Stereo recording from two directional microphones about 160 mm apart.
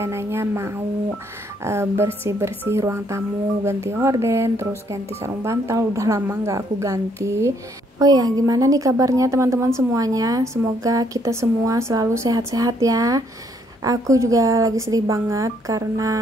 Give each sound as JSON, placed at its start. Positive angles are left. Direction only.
{"t": 0.0, "sound": "a woman's voice", "side_deg": -15}